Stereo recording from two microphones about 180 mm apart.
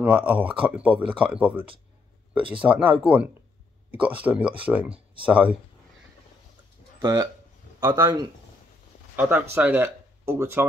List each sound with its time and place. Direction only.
0.0 s speech: 10° right (ahead or behind)
2.7 s speech: 10° right (ahead or behind)
7.0 s speech: 20° right (ahead or behind)
9.1 s speech: 10° right (ahead or behind)